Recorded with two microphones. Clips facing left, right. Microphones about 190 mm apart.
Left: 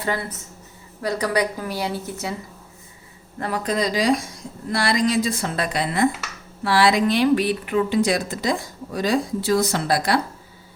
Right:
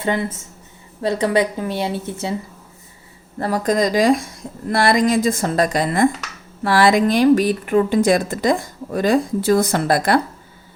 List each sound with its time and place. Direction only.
0.0 s a woman's voice: 25° right (ahead or behind)
3.3 s speech: 40° right (ahead or behind)